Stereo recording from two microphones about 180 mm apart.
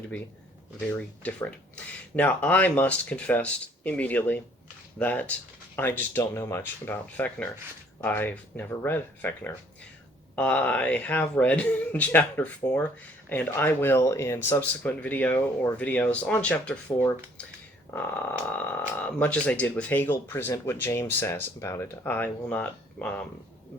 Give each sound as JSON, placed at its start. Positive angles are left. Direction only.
{"t": 0.9, "sound": "speech", "side_deg": 10}
{"t": 17.9, "sound": "frog", "side_deg": 15}
{"t": 18.5, "sound": "speech", "side_deg": 10}